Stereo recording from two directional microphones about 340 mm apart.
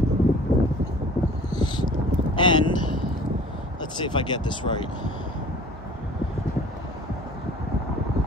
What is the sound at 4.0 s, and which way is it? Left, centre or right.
Speech, centre.